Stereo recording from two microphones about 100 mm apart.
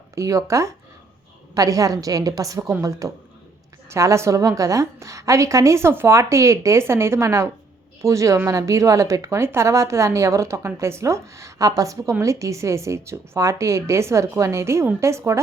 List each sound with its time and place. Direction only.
0.2 s a woman's voice: 30° right (ahead or behind)
3.8 s a woman's voice: 30° right (ahead or behind)